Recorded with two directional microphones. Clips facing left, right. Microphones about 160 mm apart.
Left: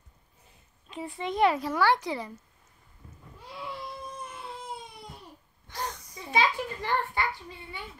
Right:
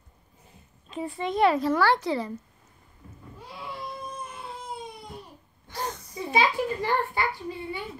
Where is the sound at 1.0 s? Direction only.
15° left (ahead or behind).